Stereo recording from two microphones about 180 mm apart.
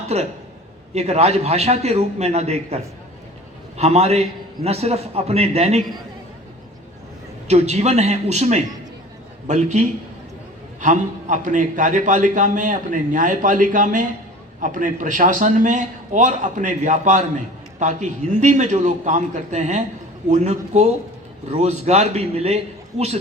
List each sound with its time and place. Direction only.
0.1 s a man's voice: 35° right (ahead or behind)
7.4 s a man's voice: 40° right (ahead or behind)